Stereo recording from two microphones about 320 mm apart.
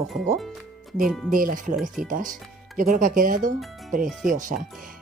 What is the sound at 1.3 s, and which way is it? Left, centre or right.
Speech, right.